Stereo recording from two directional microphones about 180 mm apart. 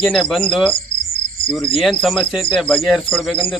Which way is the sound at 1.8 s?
Centre (ahead or behind).